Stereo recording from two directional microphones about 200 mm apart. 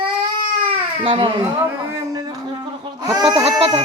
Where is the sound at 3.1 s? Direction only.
20° right (ahead or behind).